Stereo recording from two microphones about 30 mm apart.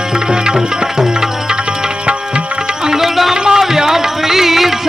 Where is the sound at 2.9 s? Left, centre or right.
Centre.